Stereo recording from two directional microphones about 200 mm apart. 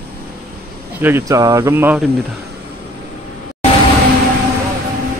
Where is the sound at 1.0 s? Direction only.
15° right (ahead or behind).